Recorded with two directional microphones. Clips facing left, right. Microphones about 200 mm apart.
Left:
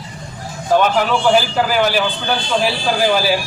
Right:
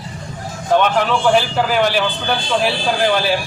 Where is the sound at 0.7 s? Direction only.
5° left (ahead or behind).